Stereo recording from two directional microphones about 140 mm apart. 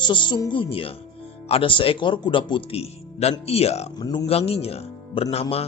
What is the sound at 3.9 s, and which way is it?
Speech, 30° left (ahead or behind).